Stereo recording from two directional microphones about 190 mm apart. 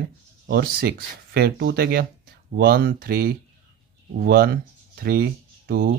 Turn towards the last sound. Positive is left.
turn(degrees=-50)  # may be behind; listen again after turning